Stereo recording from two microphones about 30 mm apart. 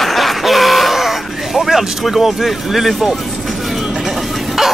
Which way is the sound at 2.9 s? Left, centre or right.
Centre.